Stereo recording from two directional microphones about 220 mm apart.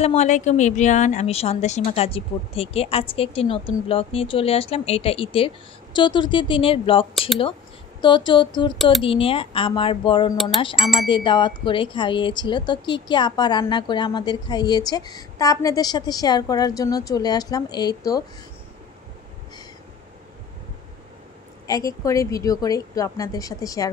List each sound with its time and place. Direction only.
0.0 s speech: 30° left (ahead or behind)
10.8 s wind chime: centre (ahead or behind)
11.1 s speech: 20° left (ahead or behind)
21.6 s a woman's voice: 15° left (ahead or behind)